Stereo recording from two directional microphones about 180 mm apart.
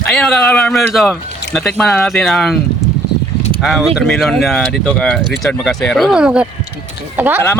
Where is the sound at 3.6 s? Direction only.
Centre (ahead or behind).